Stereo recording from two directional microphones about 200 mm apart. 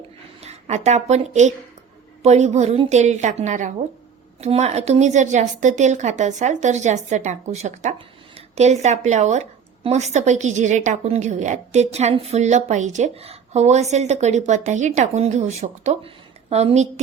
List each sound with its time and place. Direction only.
0.4 s a woman's voice: 35° right (ahead or behind)